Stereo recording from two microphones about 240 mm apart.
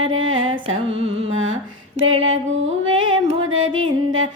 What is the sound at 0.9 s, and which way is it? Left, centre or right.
Music, right.